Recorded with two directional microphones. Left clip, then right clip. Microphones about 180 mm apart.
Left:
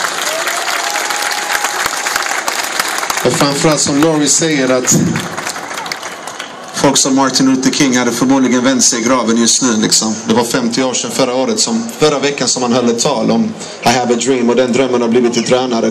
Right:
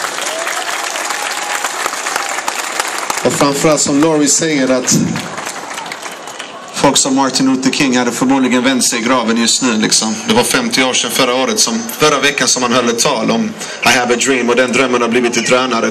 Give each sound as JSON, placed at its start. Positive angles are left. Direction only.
{"t": 3.3, "sound": "speech", "side_deg": -50}
{"t": 6.8, "sound": "a man's voice", "side_deg": -30}